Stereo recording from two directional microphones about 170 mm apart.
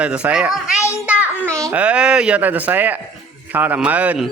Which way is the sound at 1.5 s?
20° right (ahead or behind).